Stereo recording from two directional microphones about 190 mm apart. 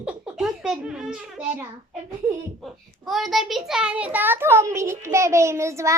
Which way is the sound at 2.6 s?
Centre (ahead or behind).